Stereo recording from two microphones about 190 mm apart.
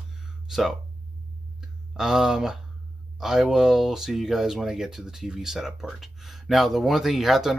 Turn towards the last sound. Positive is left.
turn(degrees=0)  # may be behind; listen again after turning